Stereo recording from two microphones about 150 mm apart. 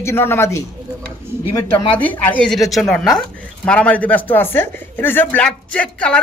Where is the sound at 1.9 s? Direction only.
10° left (ahead or behind).